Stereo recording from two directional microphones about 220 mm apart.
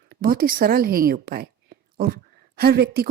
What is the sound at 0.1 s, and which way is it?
A woman's voice, 40° right (ahead or behind).